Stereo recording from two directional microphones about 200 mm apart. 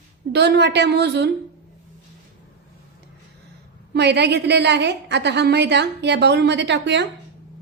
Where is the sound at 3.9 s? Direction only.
55° right (ahead or behind).